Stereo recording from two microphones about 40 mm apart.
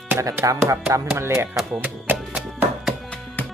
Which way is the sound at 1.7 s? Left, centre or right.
Right.